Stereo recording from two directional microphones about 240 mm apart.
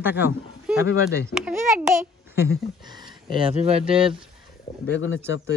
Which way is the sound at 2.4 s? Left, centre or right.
Centre.